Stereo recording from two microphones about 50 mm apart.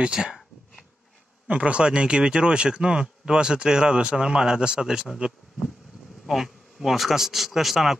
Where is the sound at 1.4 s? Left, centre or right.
Right.